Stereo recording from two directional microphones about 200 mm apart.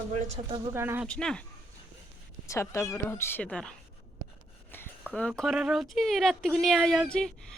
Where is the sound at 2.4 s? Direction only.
15° left (ahead or behind).